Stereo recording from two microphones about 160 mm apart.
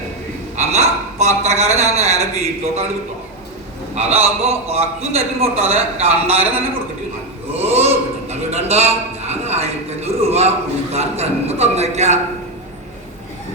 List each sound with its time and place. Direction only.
0.5 s a man's voice: 45° right (ahead or behind)
3.9 s a man's voice: 40° right (ahead or behind)
7.5 s a sound: 40° right (ahead or behind)